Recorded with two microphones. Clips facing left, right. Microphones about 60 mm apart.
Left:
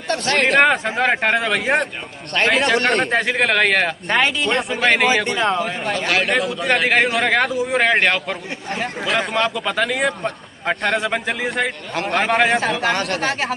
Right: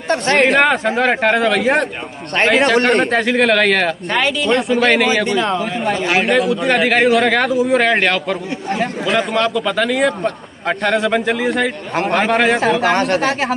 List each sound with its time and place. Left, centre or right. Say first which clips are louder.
0.1 s speech: right 5 dB; right
0.5 s speech: right 2 dB; centre
4.1 s speech: left 2 dB; left
4.5 s speech: right 4 dB; centre
5.9 s a man's voice: right 2 dB; centre
6.4 s speech: right 4 dB; centre